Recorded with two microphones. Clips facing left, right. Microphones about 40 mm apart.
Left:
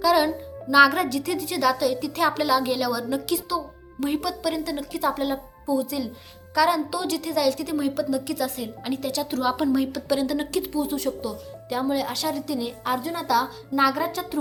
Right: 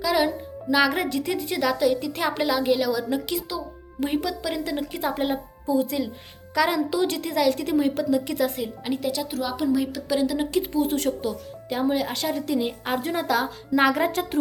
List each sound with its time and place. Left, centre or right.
0.0 s music: centre
0.9 s a woman's voice: right
8.6 s a woman's voice: centre
9.4 s a woman's voice: centre
9.7 s a woman's voice: centre
10.5 s speech: right
10.8 s speech: right
11.7 s speech: right
12.1 s a woman's voice: right
13.0 s speech: right